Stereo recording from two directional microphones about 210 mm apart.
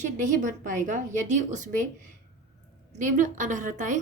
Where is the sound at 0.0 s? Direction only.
35° right (ahead or behind).